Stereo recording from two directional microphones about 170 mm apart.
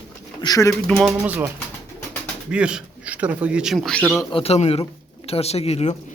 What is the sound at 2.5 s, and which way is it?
A man's voice, 5° right (ahead or behind).